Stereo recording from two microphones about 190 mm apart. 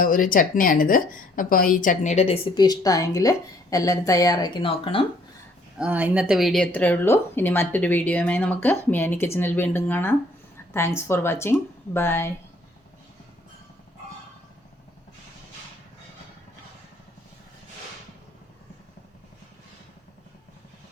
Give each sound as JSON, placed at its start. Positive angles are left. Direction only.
{"t": 0.0, "sound": "a woman's voice", "side_deg": 45}
{"t": 5.7, "sound": "a woman's voice", "side_deg": -5}